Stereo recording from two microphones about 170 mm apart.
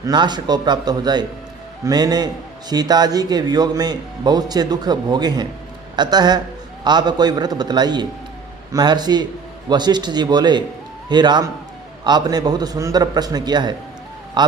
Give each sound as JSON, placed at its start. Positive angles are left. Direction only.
{"t": 0.0, "sound": "a man's voice", "side_deg": -25}